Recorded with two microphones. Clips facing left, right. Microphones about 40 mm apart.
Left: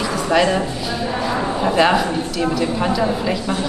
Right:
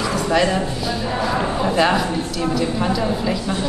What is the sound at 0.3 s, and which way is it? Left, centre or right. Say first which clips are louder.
A woman's voice: left 3 dB; centre.